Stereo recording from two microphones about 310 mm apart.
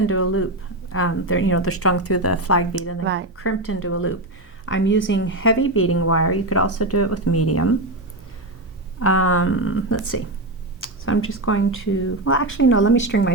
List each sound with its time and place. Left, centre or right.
0.0 s a woman's voice: left
3.0 s speech: right
3.3 s a woman's voice: left
9.0 s speech: left